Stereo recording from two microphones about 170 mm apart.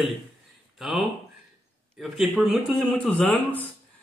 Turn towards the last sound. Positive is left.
turn(degrees=5)  # may be behind; listen again after turning